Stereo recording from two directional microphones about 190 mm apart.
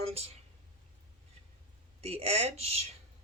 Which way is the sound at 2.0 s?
30° right (ahead or behind).